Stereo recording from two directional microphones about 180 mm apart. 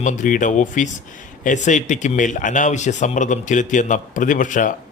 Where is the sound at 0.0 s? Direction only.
45° left (ahead or behind).